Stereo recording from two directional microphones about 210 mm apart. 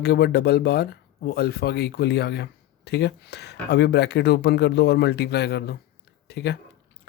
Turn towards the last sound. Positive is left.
turn(degrees=50)  # may be behind; listen again after turning